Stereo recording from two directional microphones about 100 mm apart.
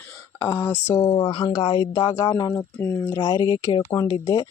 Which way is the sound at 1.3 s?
55° left (ahead or behind).